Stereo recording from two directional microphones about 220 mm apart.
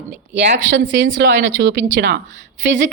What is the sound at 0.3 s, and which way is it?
A woman's voice, 55° right (ahead or behind).